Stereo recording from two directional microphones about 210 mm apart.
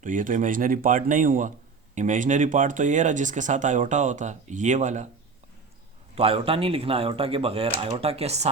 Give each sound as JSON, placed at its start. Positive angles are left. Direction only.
{"t": 0.0, "sound": "speech", "side_deg": -40}
{"t": 6.1, "sound": "speech", "side_deg": -25}